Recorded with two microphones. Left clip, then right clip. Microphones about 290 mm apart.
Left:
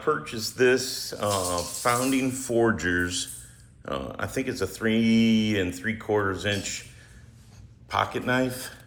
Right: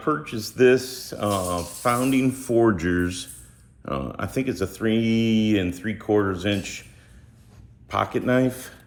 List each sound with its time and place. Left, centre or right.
0.1 s speech: centre
7.9 s speech: centre